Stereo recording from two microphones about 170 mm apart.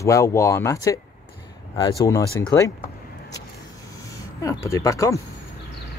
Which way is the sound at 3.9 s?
20° left (ahead or behind).